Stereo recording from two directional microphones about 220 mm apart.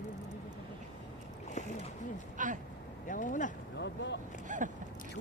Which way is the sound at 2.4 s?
35° right (ahead or behind).